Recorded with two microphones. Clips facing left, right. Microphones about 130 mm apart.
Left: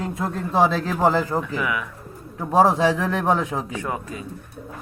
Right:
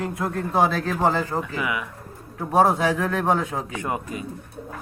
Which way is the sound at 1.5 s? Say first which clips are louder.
Left 2 dB; 10° right (ahead or behind).